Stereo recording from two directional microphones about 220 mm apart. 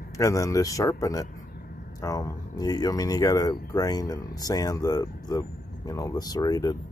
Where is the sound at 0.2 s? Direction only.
15° left (ahead or behind).